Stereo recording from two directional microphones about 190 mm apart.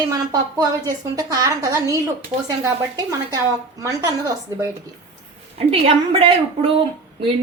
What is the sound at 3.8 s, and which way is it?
Speech, 20° right (ahead or behind).